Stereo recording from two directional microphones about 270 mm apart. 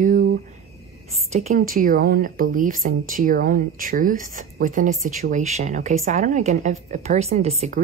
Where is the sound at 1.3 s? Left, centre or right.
Right.